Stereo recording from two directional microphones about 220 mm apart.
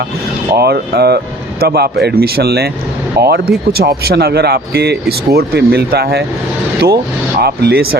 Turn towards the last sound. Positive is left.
turn(degrees=-45)  # may be behind; listen again after turning